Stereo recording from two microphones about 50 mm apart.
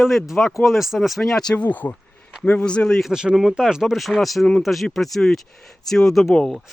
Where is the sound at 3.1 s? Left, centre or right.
Centre.